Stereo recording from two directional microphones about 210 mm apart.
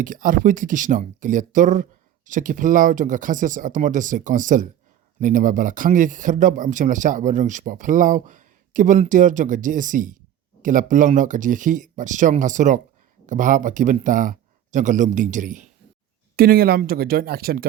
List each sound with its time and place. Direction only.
0.0 s speech: 40° right (ahead or behind)